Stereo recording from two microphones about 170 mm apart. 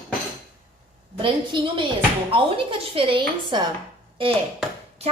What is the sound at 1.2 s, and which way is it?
Speech, 30° right (ahead or behind).